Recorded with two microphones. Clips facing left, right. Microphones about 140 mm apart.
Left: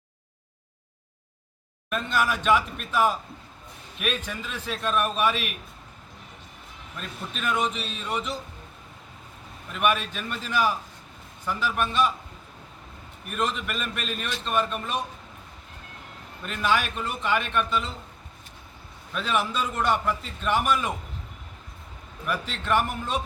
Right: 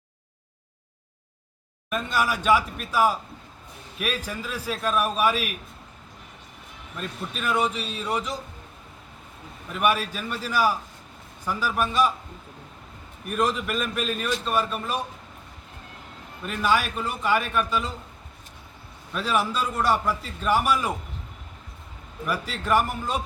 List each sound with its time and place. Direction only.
1.9 s a man's voice: 10° right (ahead or behind)
6.9 s a man's voice: centre (ahead or behind)
9.7 s a man's voice: 5° right (ahead or behind)
13.3 s a man's voice: centre (ahead or behind)
16.4 s a man's voice: 5° right (ahead or behind)
19.1 s a man's voice: 5° right (ahead or behind)
22.3 s a man's voice: 5° right (ahead or behind)